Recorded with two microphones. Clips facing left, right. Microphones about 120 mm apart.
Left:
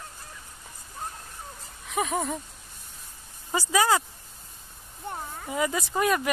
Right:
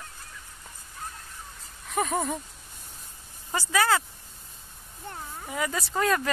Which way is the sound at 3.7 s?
15° left (ahead or behind).